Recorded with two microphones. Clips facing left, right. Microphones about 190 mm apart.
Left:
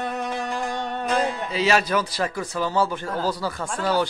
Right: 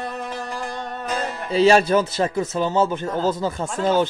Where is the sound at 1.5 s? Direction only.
30° right (ahead or behind).